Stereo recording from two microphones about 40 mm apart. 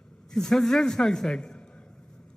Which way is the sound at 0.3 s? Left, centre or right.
Centre.